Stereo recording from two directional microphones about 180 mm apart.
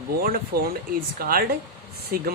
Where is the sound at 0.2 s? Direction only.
55° right (ahead or behind).